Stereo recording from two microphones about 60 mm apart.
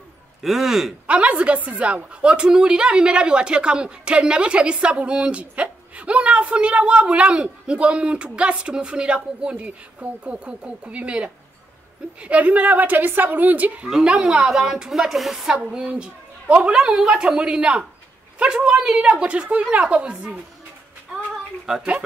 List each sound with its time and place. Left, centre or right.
0.4 s a man's voice: centre
1.0 s a woman's voice: right
13.8 s a woman's voice: centre
15.6 s a woman's voice: right
21.7 s a woman's voice: centre